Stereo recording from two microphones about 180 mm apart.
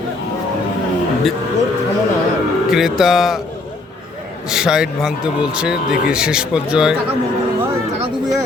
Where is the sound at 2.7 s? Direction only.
Centre (ahead or behind).